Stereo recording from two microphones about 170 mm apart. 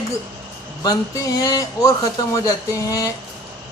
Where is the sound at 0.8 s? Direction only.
20° left (ahead or behind).